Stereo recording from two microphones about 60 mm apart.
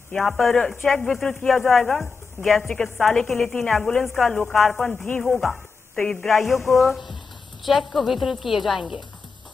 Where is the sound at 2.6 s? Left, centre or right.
Left.